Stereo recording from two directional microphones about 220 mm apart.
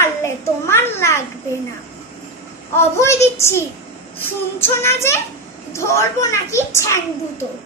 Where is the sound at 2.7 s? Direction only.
10° left (ahead or behind).